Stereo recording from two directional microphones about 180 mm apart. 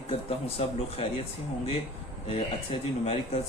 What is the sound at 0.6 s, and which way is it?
Speech, 35° left (ahead or behind).